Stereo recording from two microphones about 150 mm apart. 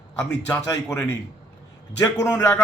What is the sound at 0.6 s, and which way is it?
Speech, 20° left (ahead or behind).